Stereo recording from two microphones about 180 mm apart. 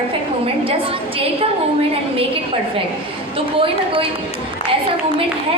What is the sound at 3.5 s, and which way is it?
Speech, 30° right (ahead or behind).